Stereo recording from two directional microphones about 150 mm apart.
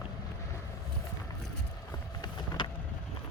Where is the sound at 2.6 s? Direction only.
35° left (ahead or behind).